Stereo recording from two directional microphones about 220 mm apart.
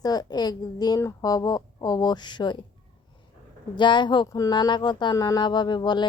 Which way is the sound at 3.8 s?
20° left (ahead or behind).